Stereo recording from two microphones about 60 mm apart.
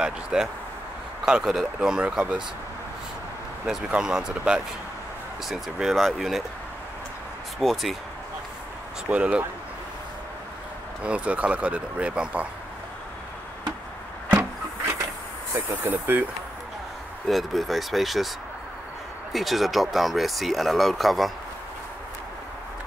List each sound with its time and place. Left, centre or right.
0.0 s speech: centre
3.9 s speech: centre
7.6 s speech: centre
9.1 s speech: right
11.0 s speech: right
15.8 s speech: right
17.3 s speech: centre
19.3 s speech: centre